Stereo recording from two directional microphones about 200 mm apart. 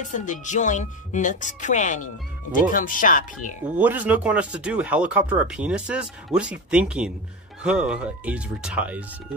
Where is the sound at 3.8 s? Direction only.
10° right (ahead or behind).